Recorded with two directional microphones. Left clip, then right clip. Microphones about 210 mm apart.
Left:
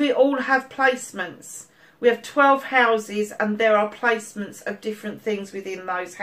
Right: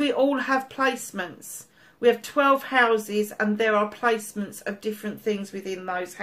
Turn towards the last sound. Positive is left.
turn(degrees=-45)  # may be behind; listen again after turning